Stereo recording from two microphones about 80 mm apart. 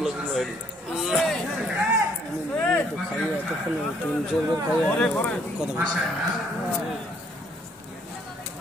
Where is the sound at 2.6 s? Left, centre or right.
Centre.